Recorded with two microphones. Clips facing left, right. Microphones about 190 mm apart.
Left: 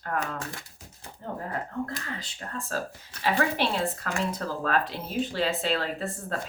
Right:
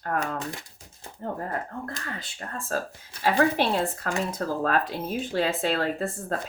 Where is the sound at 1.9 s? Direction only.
45° right (ahead or behind).